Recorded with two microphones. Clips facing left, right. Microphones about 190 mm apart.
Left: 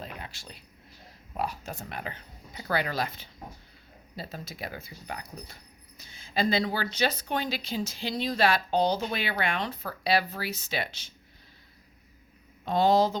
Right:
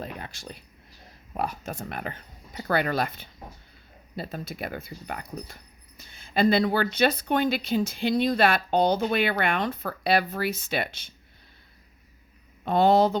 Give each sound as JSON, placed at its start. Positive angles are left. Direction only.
{"t": 0.0, "sound": "a sound", "side_deg": -50}
{"t": 1.3, "sound": "speech", "side_deg": -50}
{"t": 12.6, "sound": "speech", "side_deg": -60}